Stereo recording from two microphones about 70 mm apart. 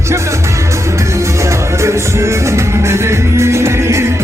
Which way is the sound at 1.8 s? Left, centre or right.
Right.